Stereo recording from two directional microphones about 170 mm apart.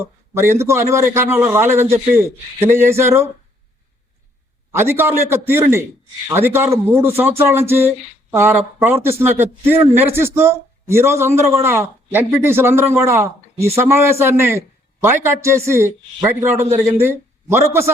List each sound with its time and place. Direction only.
0.0 s a man's voice: 15° right (ahead or behind)
4.7 s a man's voice: 15° right (ahead or behind)